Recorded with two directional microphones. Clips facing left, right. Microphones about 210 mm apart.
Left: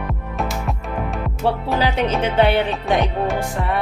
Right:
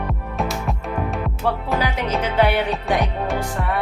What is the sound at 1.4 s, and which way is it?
Music, 30° left (ahead or behind).